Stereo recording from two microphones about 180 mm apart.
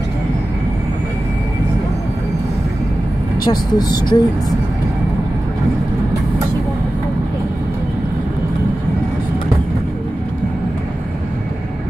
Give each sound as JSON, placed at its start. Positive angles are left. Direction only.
{"t": 3.4, "sound": "speech", "side_deg": 20}